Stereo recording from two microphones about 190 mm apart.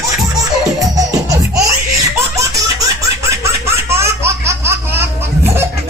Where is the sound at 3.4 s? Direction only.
15° right (ahead or behind).